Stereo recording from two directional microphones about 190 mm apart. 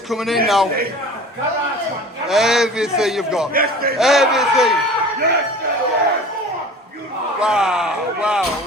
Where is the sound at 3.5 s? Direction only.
55° right (ahead or behind).